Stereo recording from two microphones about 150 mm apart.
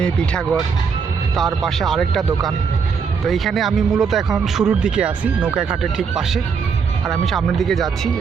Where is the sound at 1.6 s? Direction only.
Centre (ahead or behind).